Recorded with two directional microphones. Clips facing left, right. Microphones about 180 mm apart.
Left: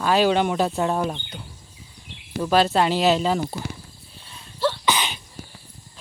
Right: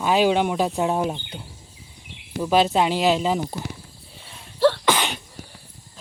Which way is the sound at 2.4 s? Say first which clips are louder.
Even; 15° right (ahead or behind).